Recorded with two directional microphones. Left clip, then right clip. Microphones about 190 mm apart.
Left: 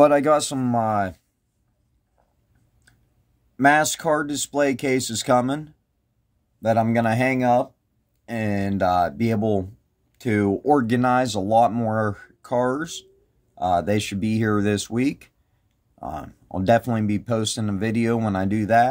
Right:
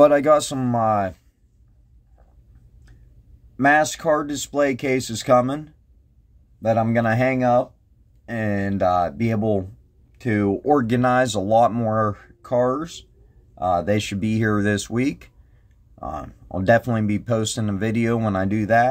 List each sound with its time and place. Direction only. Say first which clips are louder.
0.0 s speech: right 2 dB; 10° left (ahead or behind)
3.6 s speech: right 1 dB; 15° left (ahead or behind)
6.9 s speech: right 1 dB; 10° left (ahead or behind)